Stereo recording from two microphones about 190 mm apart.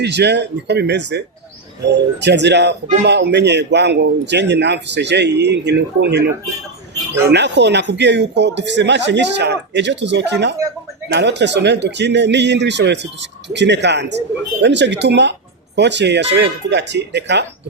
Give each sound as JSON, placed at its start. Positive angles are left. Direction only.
{"t": 0.0, "sound": "speech", "side_deg": -65}
{"t": 7.3, "sound": "a man's voice", "side_deg": -65}